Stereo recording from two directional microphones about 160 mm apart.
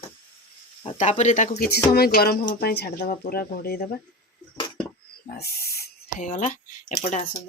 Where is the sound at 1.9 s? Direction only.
75° left (ahead or behind).